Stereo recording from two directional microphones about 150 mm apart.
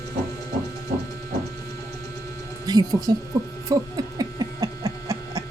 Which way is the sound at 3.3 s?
25° right (ahead or behind).